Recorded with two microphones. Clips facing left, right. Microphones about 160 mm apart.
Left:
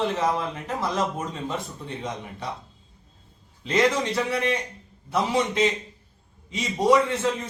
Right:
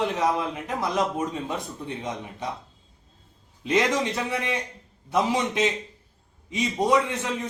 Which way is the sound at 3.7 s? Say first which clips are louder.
Left 1 dB; 15° right (ahead or behind).